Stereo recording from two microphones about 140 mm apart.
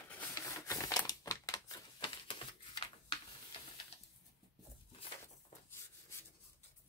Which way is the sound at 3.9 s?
45° left (ahead or behind).